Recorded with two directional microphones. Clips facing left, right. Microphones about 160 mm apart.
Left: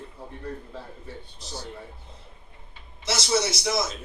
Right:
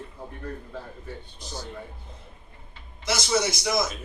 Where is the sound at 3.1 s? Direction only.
30° left (ahead or behind).